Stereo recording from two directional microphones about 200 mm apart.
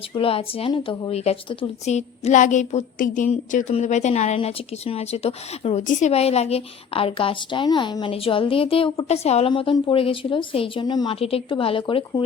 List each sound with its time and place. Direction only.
0.1 s a woman's voice: 25° left (ahead or behind)